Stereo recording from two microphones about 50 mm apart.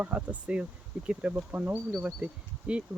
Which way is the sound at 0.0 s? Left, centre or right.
Right.